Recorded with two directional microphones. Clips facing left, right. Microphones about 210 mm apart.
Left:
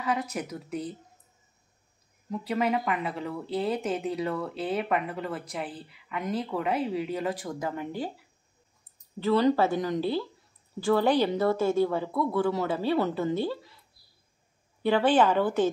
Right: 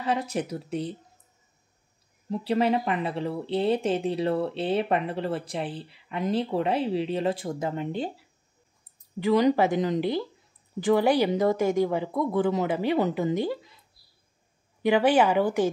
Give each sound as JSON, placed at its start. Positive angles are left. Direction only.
{"t": 0.0, "sound": "speech", "side_deg": -30}
{"t": 2.3, "sound": "speech", "side_deg": -30}
{"t": 9.2, "sound": "speech", "side_deg": -15}
{"t": 14.8, "sound": "speech", "side_deg": -15}